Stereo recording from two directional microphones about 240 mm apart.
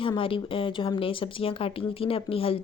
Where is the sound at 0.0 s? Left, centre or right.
Left.